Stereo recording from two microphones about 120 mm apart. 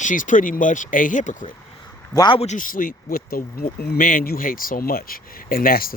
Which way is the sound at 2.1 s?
35° left (ahead or behind).